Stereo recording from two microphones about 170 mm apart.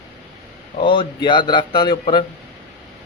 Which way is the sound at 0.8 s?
30° left (ahead or behind).